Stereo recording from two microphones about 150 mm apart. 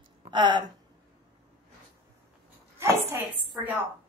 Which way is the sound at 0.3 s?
30° right (ahead or behind).